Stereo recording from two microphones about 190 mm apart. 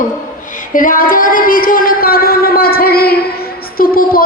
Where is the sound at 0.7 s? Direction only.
45° left (ahead or behind).